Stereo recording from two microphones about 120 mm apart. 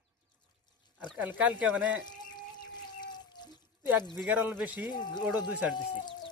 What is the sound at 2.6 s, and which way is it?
Water, 35° left (ahead or behind).